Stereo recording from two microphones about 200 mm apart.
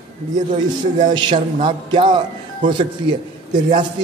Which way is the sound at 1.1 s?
25° right (ahead or behind).